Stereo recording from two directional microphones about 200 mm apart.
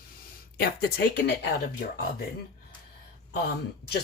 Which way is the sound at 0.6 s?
50° left (ahead or behind).